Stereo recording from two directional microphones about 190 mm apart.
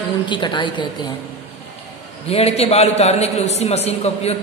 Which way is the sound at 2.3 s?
30° left (ahead or behind).